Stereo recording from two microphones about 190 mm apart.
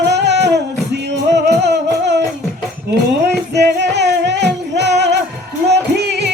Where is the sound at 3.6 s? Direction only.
60° right (ahead or behind).